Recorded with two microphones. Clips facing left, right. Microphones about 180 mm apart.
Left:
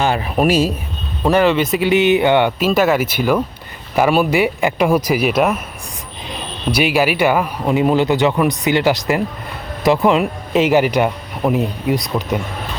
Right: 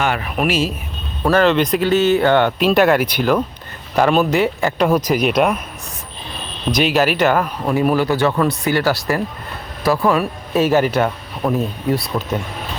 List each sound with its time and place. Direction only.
0.0 s speech: 30° left (ahead or behind)
1.2 s speech: 15° left (ahead or behind)
2.6 s speech: 5° left (ahead or behind)
6.7 s speech: 10° left (ahead or behind)